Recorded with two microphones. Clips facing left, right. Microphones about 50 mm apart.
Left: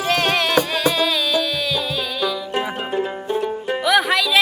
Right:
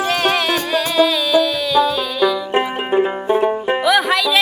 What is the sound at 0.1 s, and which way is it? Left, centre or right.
Music, centre.